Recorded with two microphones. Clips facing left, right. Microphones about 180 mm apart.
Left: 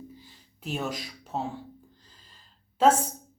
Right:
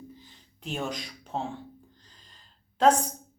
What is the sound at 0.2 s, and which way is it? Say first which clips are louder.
Gasp: left 2 dB; 5° left (ahead or behind).